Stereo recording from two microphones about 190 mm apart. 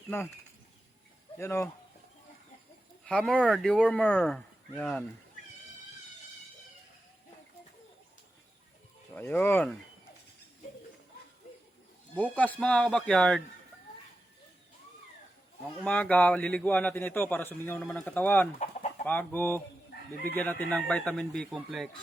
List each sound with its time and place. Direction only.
0.1 s a man's voice: 10° left (ahead or behind)
1.4 s a man's voice: 15° left (ahead or behind)
3.0 s speech: 5° left (ahead or behind)
9.1 s a man's voice: 10° left (ahead or behind)
12.1 s speech: 10° left (ahead or behind)
15.8 s a man's voice: 5° left (ahead or behind)
18.6 s chicken: 35° left (ahead or behind)
19.0 s a man's voice: 10° left (ahead or behind)
19.9 s chicken: 55° left (ahead or behind)
20.3 s speech: 10° left (ahead or behind)